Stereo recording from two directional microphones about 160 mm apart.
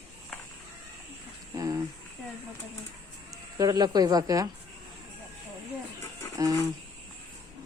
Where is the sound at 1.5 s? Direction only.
20° right (ahead or behind).